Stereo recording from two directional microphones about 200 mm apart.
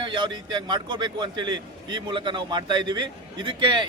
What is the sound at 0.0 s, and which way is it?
A man's voice, 25° right (ahead or behind).